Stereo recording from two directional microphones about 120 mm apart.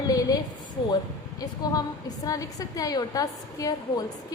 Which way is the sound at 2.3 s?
30° left (ahead or behind).